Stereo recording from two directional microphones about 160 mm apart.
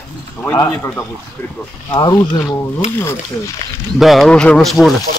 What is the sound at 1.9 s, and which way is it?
Speech, 25° left (ahead or behind).